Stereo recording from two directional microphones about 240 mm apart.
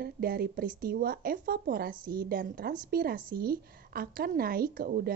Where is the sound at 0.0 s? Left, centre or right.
Right.